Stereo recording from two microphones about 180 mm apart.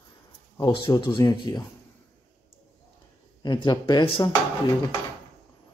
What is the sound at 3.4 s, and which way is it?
Speech, 25° left (ahead or behind).